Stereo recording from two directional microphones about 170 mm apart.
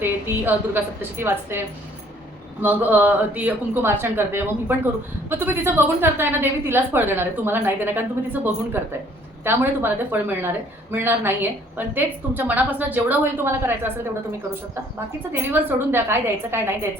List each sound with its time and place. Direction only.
0.0 s a woman's voice: 10° right (ahead or behind)
15.3 s a woman's voice: 10° right (ahead or behind)